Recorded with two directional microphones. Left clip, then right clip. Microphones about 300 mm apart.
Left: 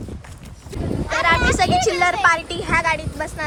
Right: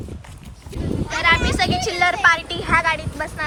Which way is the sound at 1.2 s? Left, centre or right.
Centre.